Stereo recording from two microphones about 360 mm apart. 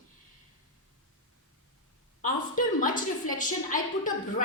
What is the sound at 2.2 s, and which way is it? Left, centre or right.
A woman's voice, left.